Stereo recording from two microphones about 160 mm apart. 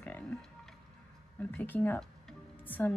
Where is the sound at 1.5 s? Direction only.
10° left (ahead or behind).